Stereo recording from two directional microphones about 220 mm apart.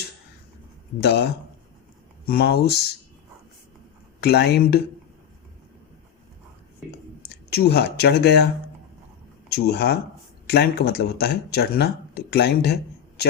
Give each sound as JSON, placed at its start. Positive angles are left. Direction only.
{"t": 1.0, "sound": "speech", "side_deg": 50}
{"t": 4.2, "sound": "speech", "side_deg": 50}
{"t": 7.3, "sound": "speech", "side_deg": 45}
{"t": 9.5, "sound": "speech", "side_deg": 45}